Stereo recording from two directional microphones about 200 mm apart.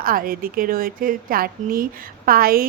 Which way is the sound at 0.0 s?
45° right (ahead or behind).